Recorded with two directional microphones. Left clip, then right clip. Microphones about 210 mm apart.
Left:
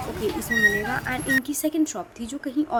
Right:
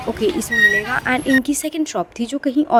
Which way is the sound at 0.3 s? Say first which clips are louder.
Right 5 dB; 40° right (ahead or behind).